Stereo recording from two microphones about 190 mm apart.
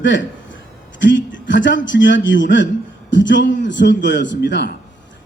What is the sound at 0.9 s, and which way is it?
A woman's voice, 75° left (ahead or behind).